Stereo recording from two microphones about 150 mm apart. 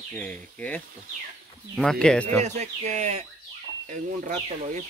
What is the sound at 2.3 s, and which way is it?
Speech, 50° right (ahead or behind).